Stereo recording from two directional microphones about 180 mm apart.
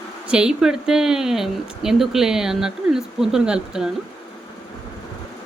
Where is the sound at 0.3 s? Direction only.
5° right (ahead or behind).